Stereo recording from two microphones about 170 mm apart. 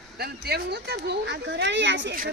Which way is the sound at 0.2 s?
70° right (ahead or behind).